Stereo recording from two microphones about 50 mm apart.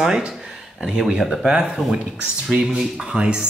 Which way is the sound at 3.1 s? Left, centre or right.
Right.